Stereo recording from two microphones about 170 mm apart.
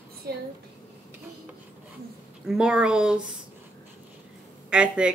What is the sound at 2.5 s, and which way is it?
Speech, 5° right (ahead or behind).